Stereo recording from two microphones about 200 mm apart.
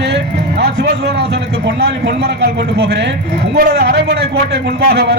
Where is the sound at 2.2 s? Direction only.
55° right (ahead or behind).